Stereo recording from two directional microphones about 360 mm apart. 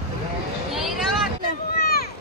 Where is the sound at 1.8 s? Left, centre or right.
Left.